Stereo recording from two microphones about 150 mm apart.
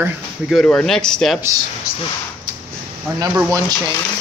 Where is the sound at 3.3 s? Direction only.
20° right (ahead or behind).